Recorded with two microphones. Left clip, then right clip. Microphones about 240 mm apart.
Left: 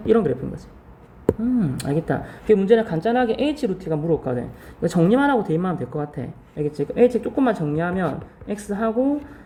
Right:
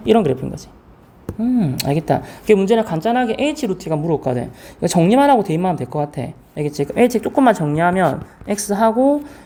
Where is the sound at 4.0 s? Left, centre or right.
Right.